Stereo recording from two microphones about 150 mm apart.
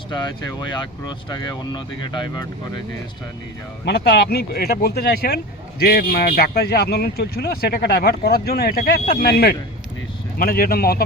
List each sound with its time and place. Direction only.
0.1 s speech: 30° left (ahead or behind)
3.8 s speech: 90° left
10.3 s a man's voice: 75° left (ahead or behind)